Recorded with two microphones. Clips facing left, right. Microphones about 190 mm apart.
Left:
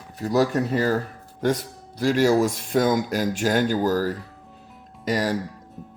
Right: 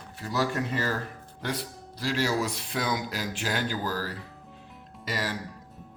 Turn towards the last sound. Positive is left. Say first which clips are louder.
# left 9 dB
turn(degrees=45)  # may be behind; listen again after turning